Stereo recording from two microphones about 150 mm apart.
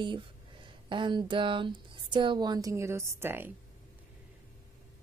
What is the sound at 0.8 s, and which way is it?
Speech, 30° right (ahead or behind).